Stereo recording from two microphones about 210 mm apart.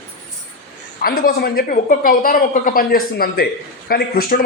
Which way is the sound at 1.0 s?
45° left (ahead or behind).